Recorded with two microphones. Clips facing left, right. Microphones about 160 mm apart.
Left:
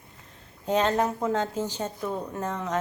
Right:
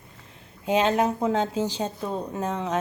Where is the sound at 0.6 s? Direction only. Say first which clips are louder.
Right 2 dB; 15° right (ahead or behind).